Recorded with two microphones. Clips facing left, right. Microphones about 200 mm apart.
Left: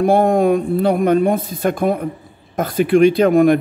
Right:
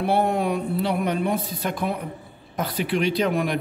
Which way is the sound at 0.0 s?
45° left (ahead or behind).